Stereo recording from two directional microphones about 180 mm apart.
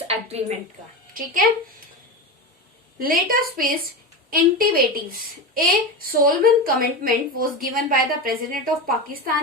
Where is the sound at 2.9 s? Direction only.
55° right (ahead or behind).